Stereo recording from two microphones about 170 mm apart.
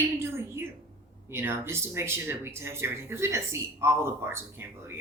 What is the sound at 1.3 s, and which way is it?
Speech, 15° right (ahead or behind).